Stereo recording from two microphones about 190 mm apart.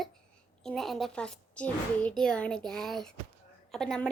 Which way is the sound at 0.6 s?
Centre (ahead or behind).